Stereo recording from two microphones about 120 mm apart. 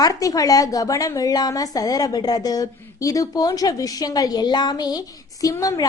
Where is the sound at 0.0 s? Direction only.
30° left (ahead or behind).